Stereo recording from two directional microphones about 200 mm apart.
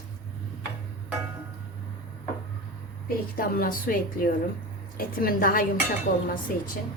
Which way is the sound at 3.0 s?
45° left (ahead or behind).